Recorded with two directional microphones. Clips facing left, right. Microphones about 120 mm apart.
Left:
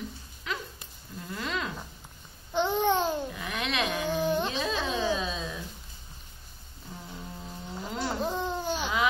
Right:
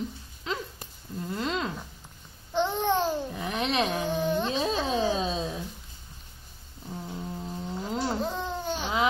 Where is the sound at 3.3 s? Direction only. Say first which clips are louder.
Right 4 dB; 35° right (ahead or behind).